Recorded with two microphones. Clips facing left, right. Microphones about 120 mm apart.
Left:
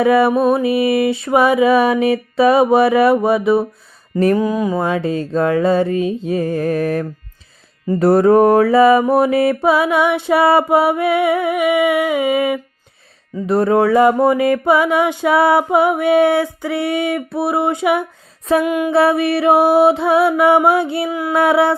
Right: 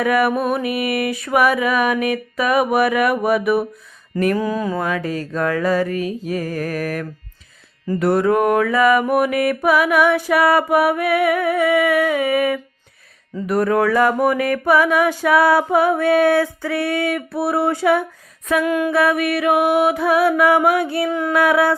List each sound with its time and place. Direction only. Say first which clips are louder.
0.0 s mantra: left 5 dB; 25° left (ahead or behind)
4.8 s mantra: left 4 dB; 25° left (ahead or behind)
18.9 s mantra: left 3 dB; 30° left (ahead or behind)
21.1 s mantra: even; 10° left (ahead or behind)
21.3 s mantra: left 3 dB; 25° left (ahead or behind)